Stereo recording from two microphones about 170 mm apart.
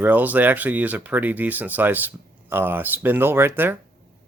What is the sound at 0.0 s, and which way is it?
Speech, 10° right (ahead or behind).